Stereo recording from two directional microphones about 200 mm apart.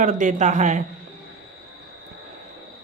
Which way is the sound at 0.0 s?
40° right (ahead or behind).